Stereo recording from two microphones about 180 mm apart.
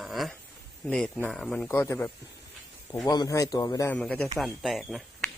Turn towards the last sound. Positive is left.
turn(degrees=0)  # may be behind; listen again after turning